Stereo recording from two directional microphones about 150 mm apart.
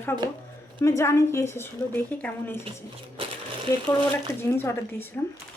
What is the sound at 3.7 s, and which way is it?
A woman's voice, 20° left (ahead or behind).